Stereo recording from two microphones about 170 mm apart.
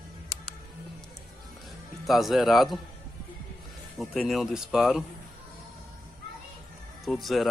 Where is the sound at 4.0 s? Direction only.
Centre (ahead or behind).